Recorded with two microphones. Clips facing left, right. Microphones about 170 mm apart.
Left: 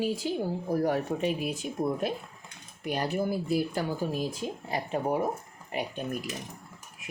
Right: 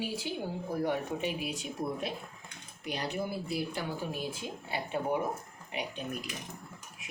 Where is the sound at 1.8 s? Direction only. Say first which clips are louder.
Left 6 dB; 55° left (ahead or behind).